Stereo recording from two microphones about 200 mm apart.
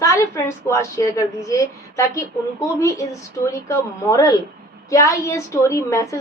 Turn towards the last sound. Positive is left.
turn(degrees=15)  # may be behind; listen again after turning